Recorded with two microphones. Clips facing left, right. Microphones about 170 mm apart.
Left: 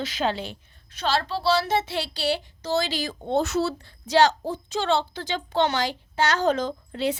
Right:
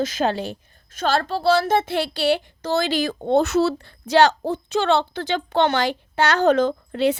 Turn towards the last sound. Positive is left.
turn(degrees=-65)  # may be behind; listen again after turning